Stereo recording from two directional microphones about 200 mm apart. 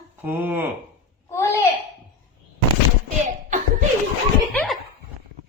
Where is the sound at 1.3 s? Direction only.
15° left (ahead or behind).